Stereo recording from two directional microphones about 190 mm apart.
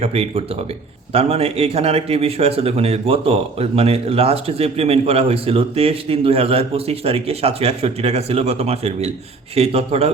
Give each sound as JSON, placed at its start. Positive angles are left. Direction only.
{"t": 0.0, "sound": "speech", "side_deg": -30}